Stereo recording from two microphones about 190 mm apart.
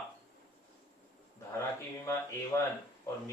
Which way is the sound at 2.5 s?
15° left (ahead or behind).